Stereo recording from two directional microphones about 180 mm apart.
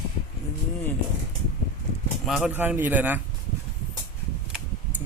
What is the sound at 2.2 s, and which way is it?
Speech, centre (ahead or behind).